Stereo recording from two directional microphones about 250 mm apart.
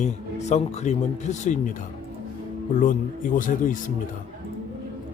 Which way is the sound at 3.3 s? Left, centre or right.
Left.